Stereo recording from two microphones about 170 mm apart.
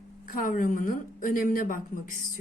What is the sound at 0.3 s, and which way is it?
A woman's voice, 55° left (ahead or behind).